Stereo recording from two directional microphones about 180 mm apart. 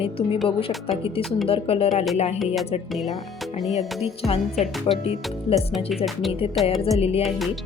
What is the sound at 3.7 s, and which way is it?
Speech, 35° left (ahead or behind).